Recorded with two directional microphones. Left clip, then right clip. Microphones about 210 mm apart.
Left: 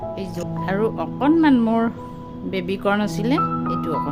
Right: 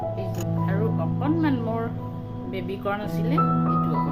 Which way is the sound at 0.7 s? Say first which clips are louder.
Left 8 dB; 50° left (ahead or behind).